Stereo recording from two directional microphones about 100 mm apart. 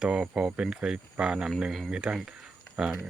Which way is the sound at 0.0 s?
10° right (ahead or behind).